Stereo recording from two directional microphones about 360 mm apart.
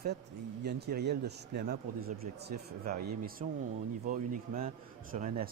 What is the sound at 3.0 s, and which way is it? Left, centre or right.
Speech, right.